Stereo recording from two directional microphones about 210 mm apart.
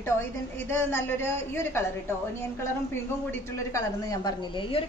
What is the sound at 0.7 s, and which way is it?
A woman's voice, 10° left (ahead or behind).